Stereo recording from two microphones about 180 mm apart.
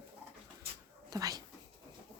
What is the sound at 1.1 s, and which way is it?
Speech, 20° right (ahead or behind).